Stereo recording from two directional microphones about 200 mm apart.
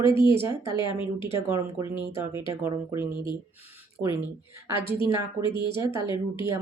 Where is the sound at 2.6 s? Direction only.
10° right (ahead or behind).